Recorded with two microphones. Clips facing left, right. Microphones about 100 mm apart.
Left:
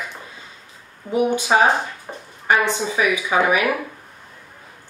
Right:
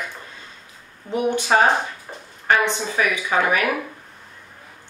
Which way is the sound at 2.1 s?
20° left (ahead or behind).